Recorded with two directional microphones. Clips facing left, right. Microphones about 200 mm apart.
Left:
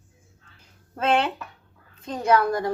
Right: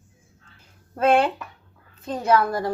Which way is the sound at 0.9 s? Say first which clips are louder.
Right 4 dB; 10° right (ahead or behind).